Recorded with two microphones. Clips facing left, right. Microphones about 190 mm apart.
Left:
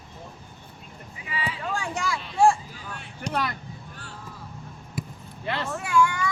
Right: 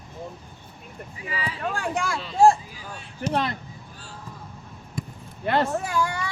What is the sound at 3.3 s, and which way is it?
Speech, 30° right (ahead or behind).